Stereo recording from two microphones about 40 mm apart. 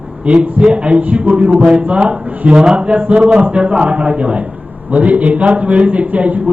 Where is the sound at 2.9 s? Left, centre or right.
Right.